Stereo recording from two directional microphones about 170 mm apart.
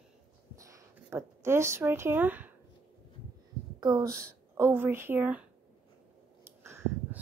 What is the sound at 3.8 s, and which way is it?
A woman's voice, 20° right (ahead or behind).